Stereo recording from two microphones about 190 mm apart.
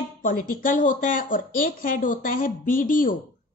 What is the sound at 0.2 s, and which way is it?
Speech, 45° left (ahead or behind).